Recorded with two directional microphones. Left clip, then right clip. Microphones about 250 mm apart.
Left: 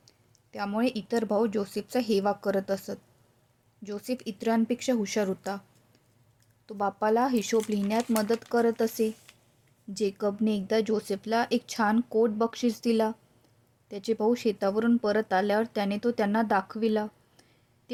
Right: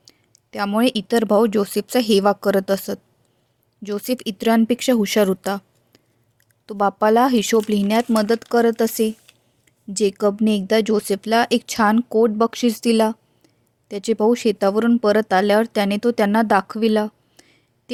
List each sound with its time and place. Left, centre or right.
0.0 s speech: right